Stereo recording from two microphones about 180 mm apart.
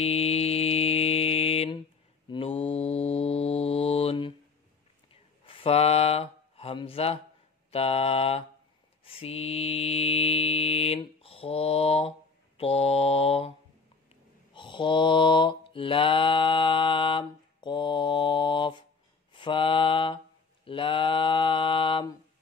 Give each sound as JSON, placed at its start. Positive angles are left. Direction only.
{"t": 0.0, "sound": "mantra", "side_deg": 35}
{"t": 5.4, "sound": "a sound", "side_deg": 30}
{"t": 7.7, "sound": "mantra", "side_deg": 35}
{"t": 14.5, "sound": "mantra", "side_deg": 25}